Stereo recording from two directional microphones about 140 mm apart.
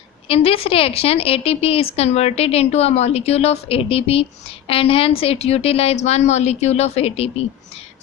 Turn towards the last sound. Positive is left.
turn(degrees=45)  # may be behind; listen again after turning